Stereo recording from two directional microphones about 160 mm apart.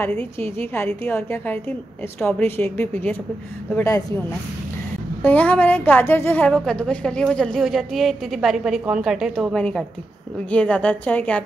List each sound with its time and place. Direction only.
0.2 s a woman's voice: 15° left (ahead or behind)
5.2 s a woman's voice: 10° left (ahead or behind)